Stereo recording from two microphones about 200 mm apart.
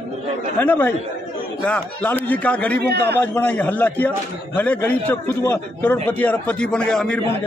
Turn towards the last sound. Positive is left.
turn(degrees=5)  # may be behind; listen again after turning